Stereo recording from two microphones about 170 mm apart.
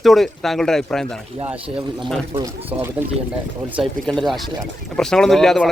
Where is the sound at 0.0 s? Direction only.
Centre (ahead or behind).